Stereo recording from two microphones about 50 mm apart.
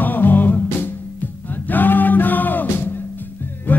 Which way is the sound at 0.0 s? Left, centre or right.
Left.